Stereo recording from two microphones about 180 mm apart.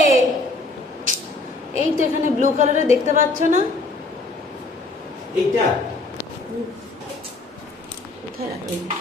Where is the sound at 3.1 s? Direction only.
45° right (ahead or behind).